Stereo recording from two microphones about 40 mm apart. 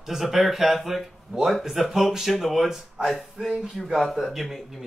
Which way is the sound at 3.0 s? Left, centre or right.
Centre.